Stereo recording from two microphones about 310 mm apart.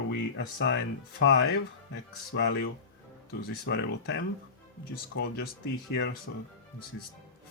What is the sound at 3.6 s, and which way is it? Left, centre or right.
Speech, left.